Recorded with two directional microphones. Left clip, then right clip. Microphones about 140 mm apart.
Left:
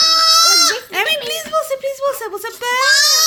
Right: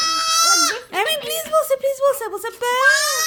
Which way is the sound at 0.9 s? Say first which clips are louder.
Left 3 dB; 25° right (ahead or behind).